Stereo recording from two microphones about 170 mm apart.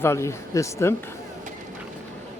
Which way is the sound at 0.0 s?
15° left (ahead or behind).